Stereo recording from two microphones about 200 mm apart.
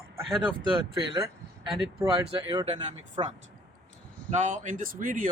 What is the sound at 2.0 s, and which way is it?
Speech, 20° right (ahead or behind).